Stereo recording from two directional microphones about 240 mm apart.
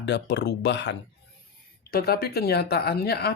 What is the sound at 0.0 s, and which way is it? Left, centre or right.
Speech, left.